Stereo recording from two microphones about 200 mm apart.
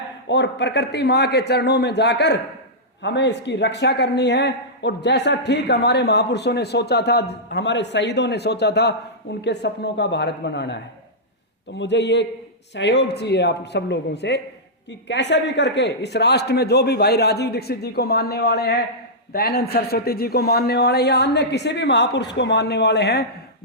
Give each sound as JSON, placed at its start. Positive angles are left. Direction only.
{"t": 0.3, "sound": "speech", "side_deg": 60}
{"t": 11.8, "sound": "speech", "side_deg": 60}